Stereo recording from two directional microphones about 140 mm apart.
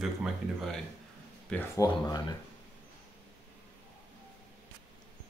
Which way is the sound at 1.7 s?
25° left (ahead or behind).